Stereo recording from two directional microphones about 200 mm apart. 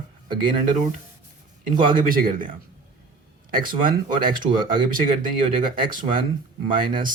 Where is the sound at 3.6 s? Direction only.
45° right (ahead or behind).